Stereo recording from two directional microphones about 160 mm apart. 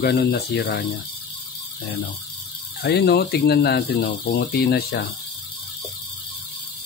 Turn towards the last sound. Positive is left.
turn(degrees=75)  # may be behind; listen again after turning